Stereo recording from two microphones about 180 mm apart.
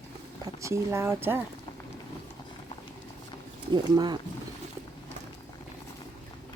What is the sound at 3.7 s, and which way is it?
Speech, 25° right (ahead or behind).